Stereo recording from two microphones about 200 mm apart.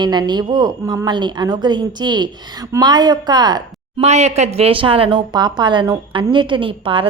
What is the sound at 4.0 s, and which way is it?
A woman's voice, 35° right (ahead or behind).